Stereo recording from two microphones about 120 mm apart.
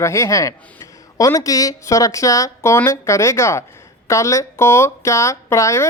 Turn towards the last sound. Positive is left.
turn(degrees=25)  # may be behind; listen again after turning